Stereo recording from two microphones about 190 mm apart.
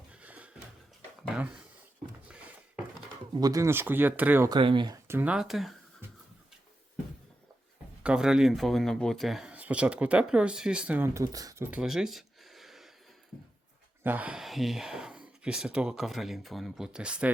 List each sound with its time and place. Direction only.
0.1 s a sound: 5° right (ahead or behind)
3.3 s speech: 20° right (ahead or behind)
4.4 s speech: 25° right (ahead or behind)
5.0 s speech: 10° right (ahead or behind)
8.0 s speech: 5° right (ahead or behind)
14.0 s speech: 10° right (ahead or behind)